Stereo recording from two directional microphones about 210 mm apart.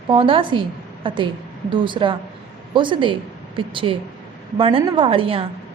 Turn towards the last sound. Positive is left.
turn(degrees=-25)  # may be behind; listen again after turning